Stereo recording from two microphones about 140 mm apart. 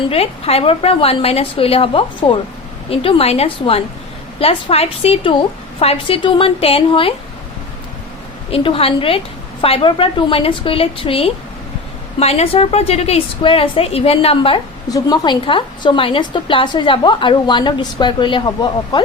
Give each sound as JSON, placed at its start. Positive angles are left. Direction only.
{"t": 0.0, "sound": "a woman's voice", "side_deg": 45}
{"t": 8.4, "sound": "a woman's voice", "side_deg": 40}
{"t": 14.8, "sound": "a woman's voice", "side_deg": 30}